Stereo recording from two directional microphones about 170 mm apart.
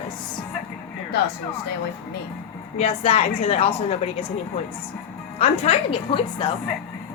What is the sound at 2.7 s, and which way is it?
A woman's voice, 35° left (ahead or behind).